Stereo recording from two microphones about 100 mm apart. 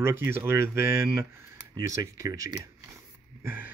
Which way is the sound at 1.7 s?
40° right (ahead or behind).